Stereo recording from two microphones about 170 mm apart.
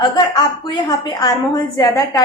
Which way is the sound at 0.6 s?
25° left (ahead or behind).